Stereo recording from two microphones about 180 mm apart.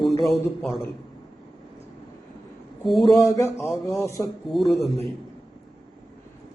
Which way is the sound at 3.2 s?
15° left (ahead or behind).